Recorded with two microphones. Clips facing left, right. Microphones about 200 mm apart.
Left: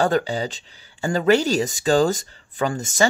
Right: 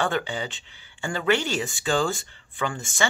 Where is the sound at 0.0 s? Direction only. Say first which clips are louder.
Left 6 dB; 35° left (ahead or behind).